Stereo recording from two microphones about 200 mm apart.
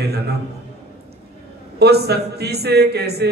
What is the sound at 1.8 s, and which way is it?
A man's voice, 55° right (ahead or behind).